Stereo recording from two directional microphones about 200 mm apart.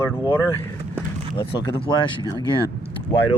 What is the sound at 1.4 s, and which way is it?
Speech, 25° left (ahead or behind).